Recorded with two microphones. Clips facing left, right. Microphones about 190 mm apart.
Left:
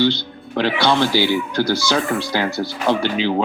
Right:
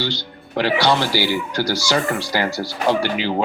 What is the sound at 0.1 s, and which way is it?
Speech, 15° right (ahead or behind).